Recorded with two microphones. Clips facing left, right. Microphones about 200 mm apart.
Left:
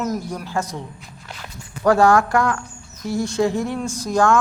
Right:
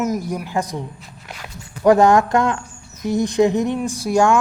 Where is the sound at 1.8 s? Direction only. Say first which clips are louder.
Right 2 dB; 20° right (ahead or behind).